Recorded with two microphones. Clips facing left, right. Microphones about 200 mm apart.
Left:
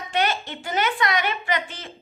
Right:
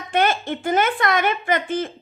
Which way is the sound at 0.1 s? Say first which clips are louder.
Right 5 dB; 50° right (ahead or behind).